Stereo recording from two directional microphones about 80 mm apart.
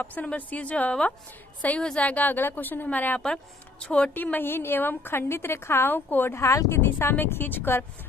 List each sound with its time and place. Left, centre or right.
0.0 s a woman's voice: centre; by 6.8 s left
6.8 s a woman's voice: left